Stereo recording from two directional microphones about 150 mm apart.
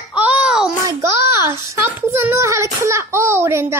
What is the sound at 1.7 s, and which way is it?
Child singing, 15° right (ahead or behind).